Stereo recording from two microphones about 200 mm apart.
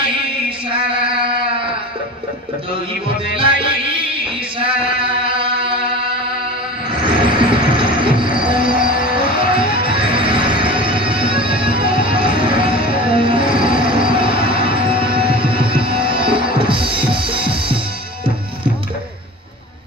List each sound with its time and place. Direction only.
3.3 s music: 25° right (ahead or behind)
5.2 s music: 25° right (ahead or behind)
7.0 s music: 25° right (ahead or behind)